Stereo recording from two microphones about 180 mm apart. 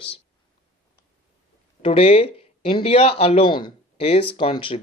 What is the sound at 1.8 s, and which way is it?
Speech, 30° left (ahead or behind).